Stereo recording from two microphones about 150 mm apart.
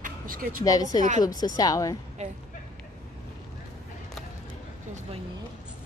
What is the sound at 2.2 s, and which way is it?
Speech, 50° right (ahead or behind).